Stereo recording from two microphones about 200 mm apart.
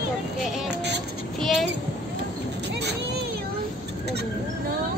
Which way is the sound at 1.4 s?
Centre (ahead or behind).